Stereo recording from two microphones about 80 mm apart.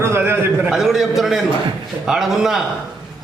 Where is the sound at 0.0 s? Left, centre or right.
Right.